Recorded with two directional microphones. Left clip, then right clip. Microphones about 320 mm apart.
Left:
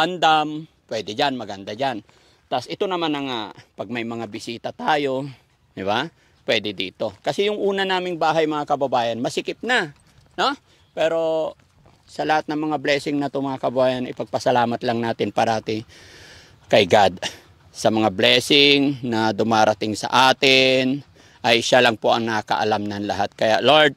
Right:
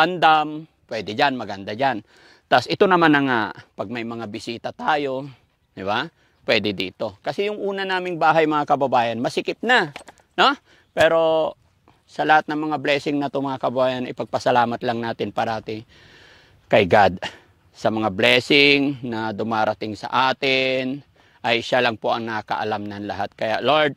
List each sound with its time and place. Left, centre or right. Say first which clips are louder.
0.0 s speech: right 2 dB; right; by 8.0 s centre
8.0 s speech: right 2 dB; right
10.3 s speech: right 4 dB; right
12.2 s a man's voice: right 3 dB; right; by 23.9 s centre